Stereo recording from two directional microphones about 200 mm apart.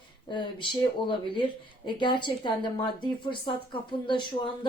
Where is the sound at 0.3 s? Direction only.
25° left (ahead or behind).